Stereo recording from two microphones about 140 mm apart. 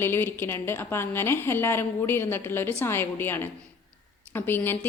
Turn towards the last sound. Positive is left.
turn(degrees=15)  # may be behind; listen again after turning